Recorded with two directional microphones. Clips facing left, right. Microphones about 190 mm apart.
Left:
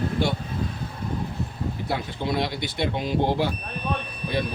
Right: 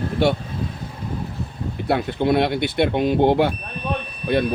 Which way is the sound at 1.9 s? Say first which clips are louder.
Right 10 dB; 60° right (ahead or behind).